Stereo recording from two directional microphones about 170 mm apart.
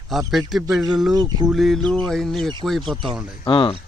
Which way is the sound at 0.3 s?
Centre (ahead or behind).